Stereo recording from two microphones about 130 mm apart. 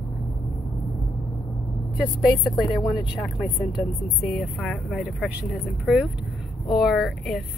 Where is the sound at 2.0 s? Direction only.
5° right (ahead or behind).